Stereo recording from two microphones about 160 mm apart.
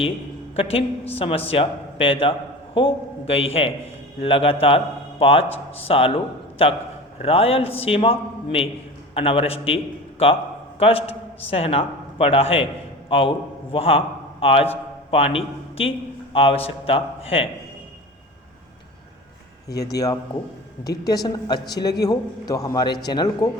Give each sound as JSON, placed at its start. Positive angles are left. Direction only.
{"t": 0.5, "sound": "a woman's voice", "side_deg": 35}
{"t": 19.7, "sound": "speech", "side_deg": 85}
{"t": 21.0, "sound": "a man's voice", "side_deg": 25}